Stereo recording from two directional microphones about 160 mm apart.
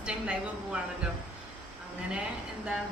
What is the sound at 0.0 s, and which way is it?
Speech, 5° right (ahead or behind).